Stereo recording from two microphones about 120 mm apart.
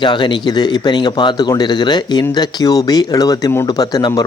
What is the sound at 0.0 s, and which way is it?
Speech, 40° left (ahead or behind).